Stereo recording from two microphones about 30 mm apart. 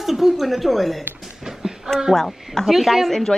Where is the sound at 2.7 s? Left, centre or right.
Centre.